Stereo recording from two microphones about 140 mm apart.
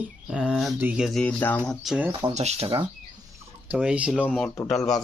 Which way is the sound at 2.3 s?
50° right (ahead or behind).